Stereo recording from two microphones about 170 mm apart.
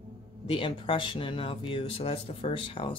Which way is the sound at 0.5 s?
30° left (ahead or behind).